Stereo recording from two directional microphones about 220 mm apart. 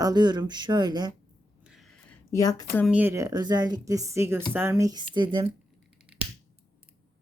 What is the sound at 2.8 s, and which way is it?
Speech, 5° right (ahead or behind).